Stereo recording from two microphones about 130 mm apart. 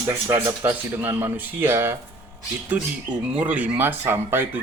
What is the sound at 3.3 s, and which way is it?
Speech, 10° right (ahead or behind).